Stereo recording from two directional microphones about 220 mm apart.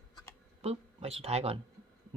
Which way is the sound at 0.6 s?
25° right (ahead or behind).